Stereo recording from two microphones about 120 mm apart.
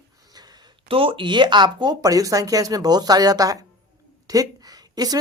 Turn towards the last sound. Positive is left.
turn(degrees=-30)  # may be behind; listen again after turning